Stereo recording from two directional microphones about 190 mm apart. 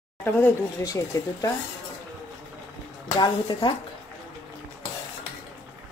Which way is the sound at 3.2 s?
25° left (ahead or behind).